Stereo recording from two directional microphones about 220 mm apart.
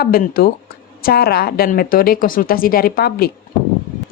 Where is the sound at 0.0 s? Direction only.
45° left (ahead or behind).